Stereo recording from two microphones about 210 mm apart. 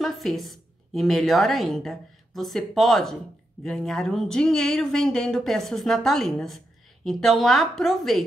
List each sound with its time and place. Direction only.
0.0 s a woman's voice: centre (ahead or behind)